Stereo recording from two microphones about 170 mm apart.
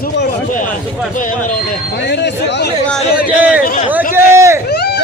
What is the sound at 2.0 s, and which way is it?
Speech, 85° left.